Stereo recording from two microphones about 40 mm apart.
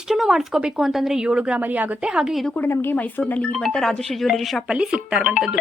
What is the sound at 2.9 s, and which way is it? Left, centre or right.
Speech, left.